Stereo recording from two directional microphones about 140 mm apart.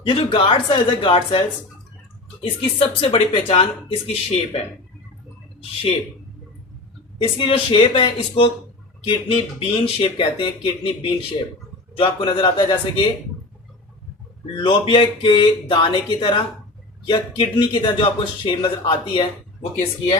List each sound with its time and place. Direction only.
0.0 s speech: 35° left (ahead or behind)
2.4 s speech: 40° left (ahead or behind)
7.2 s speech: 35° left (ahead or behind)
14.5 s speech: 40° left (ahead or behind)